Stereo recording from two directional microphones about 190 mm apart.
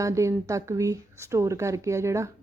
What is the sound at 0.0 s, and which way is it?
Speech, 15° right (ahead or behind).